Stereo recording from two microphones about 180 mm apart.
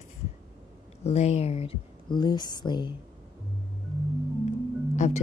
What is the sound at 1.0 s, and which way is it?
Speech, 35° left (ahead or behind).